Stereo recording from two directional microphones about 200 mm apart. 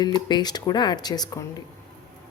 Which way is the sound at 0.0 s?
20° left (ahead or behind).